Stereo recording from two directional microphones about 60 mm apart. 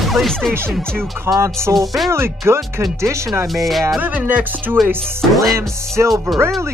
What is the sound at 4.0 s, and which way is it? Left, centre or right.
Speech, right.